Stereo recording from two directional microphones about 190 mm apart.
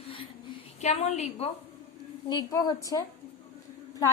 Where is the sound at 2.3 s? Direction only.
20° left (ahead or behind).